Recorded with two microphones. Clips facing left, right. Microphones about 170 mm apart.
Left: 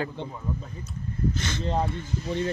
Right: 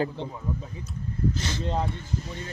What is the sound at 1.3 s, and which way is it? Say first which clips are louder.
Speech: even; 35° right (ahead or behind).